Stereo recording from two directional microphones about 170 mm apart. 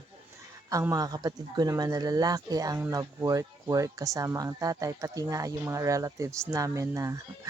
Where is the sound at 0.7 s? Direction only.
20° right (ahead or behind).